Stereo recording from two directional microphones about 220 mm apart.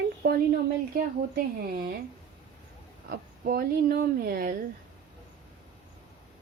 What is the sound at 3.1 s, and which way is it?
A woman's voice, 45° right (ahead or behind).